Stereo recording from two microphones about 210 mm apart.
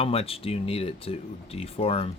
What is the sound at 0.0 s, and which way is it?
Speech, 30° left (ahead or behind).